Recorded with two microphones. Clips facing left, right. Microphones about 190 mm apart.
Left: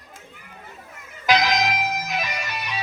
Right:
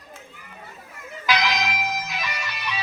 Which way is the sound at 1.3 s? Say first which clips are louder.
Left 4 dB; 45° left (ahead or behind).